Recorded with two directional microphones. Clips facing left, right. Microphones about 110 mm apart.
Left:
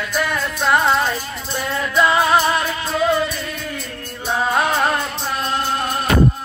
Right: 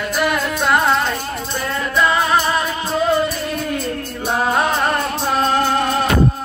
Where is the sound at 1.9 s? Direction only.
20° left (ahead or behind).